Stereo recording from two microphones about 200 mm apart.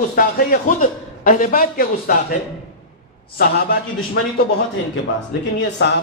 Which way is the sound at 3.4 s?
50° left (ahead or behind).